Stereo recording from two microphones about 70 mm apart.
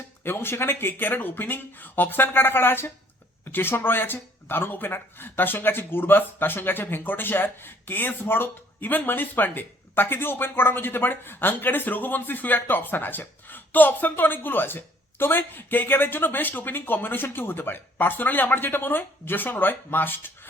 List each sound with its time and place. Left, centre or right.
0.2 s speech: left